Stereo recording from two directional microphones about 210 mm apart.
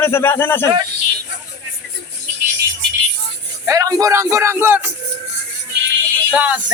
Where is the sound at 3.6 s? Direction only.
15° right (ahead or behind).